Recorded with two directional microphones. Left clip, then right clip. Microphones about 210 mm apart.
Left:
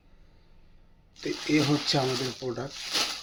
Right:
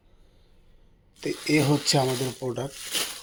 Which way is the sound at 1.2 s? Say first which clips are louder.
Right 2 dB; 35° right (ahead or behind).